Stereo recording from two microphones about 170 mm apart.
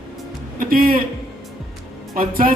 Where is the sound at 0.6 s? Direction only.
55° right (ahead or behind).